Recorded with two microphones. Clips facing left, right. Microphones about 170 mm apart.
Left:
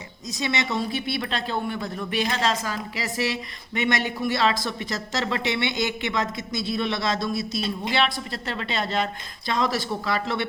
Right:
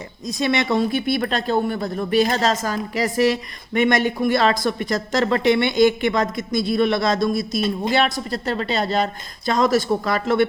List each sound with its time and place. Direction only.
0.3 s speech: 55° right (ahead or behind)